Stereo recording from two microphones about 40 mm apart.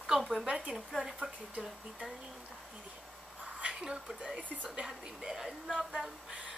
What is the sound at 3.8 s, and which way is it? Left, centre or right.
Speech, centre.